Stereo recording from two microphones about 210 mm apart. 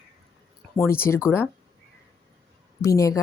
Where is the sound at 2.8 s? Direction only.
15° left (ahead or behind).